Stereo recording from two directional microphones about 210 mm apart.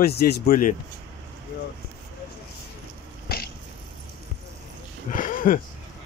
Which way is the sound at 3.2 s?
50° left (ahead or behind).